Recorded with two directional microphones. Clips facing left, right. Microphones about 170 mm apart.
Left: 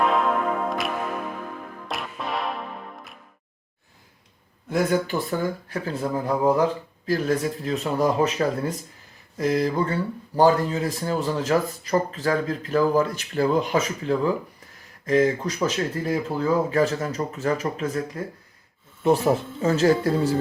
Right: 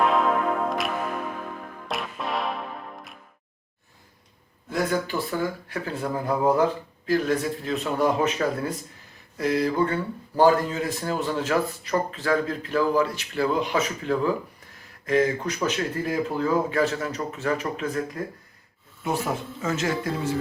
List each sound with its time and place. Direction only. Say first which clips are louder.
0.0 s music: even; centre (ahead or behind)
4.7 s speech: left 3 dB; 45° left (ahead or behind)